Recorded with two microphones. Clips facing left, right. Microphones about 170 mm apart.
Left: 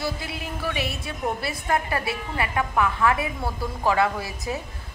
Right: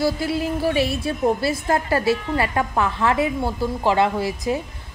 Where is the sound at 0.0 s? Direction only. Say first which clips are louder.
Right 9 dB; 35° right (ahead or behind).